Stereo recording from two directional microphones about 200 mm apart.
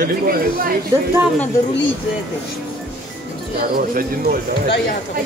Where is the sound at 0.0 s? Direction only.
45° right (ahead or behind).